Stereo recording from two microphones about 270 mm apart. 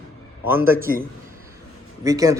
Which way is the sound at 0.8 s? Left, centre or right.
Right.